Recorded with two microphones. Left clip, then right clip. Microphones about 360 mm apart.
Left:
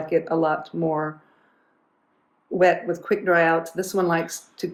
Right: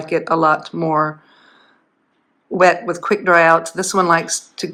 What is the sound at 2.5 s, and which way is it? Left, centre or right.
Speech, centre.